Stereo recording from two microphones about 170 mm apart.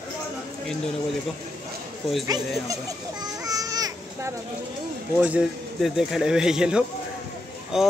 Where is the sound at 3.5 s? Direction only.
20° right (ahead or behind).